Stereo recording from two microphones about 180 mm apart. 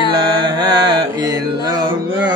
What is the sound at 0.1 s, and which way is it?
Music, 25° right (ahead or behind).